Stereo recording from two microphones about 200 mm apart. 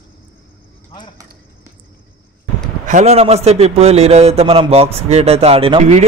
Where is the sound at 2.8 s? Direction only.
35° right (ahead or behind).